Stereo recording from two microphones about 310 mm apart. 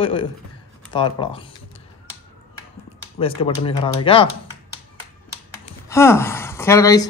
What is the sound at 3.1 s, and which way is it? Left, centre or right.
Speech, centre.